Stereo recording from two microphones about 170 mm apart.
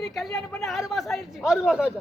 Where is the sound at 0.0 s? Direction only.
Centre (ahead or behind).